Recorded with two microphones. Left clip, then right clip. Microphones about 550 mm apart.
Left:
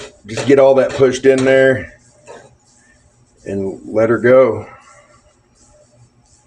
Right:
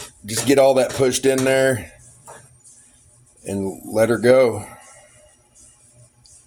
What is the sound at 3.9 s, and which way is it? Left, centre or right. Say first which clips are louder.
Speech: left 4 dB; right.